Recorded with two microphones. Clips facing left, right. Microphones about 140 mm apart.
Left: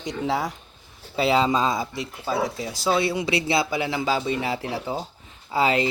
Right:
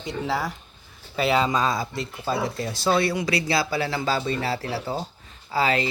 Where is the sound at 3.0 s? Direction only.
20° left (ahead or behind).